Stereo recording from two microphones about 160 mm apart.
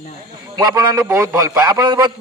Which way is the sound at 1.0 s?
25° right (ahead or behind).